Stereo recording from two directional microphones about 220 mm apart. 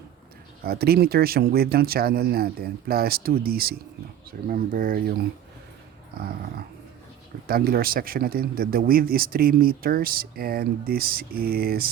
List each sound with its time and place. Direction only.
0.6 s speech: 45° right (ahead or behind)
7.4 s speech: 45° right (ahead or behind)